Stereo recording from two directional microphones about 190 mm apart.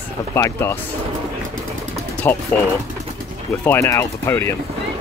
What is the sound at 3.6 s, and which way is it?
Speech, 15° left (ahead or behind).